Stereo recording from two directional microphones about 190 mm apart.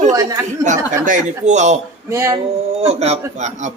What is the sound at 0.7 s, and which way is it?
A man's voice, 45° right (ahead or behind).